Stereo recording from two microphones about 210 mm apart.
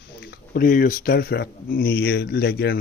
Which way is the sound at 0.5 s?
40° left (ahead or behind).